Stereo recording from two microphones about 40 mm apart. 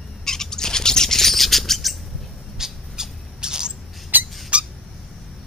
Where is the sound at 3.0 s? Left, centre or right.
Centre.